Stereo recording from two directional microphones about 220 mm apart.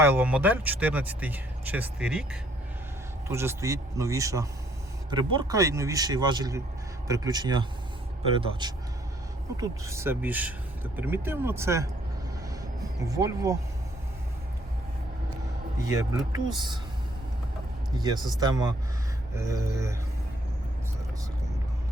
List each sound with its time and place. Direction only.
0.0 s speech: 10° right (ahead or behind)
13.0 s speech: 15° right (ahead or behind)
15.8 s speech: 15° right (ahead or behind)
17.9 s speech: 20° right (ahead or behind)